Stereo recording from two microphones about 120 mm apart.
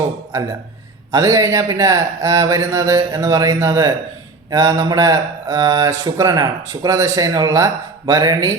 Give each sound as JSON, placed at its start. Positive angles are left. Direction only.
{"t": 1.1, "sound": "speech", "side_deg": -25}